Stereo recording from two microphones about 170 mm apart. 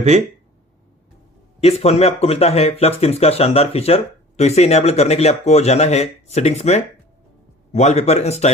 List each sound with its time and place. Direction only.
0.1 s speech: 40° right (ahead or behind)
1.6 s speech: 40° left (ahead or behind)